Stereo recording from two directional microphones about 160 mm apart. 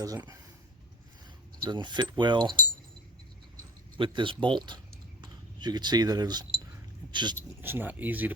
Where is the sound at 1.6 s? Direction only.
30° right (ahead or behind).